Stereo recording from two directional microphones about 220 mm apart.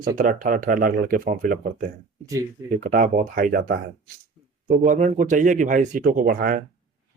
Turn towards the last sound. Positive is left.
turn(degrees=-40)  # may be behind; listen again after turning